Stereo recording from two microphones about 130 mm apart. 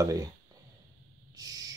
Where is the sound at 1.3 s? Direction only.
30° right (ahead or behind).